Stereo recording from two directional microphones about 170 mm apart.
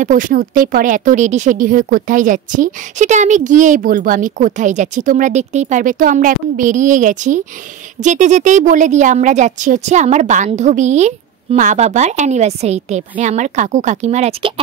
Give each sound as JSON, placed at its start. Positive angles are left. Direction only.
{"t": 0.0, "sound": "speech", "side_deg": -50}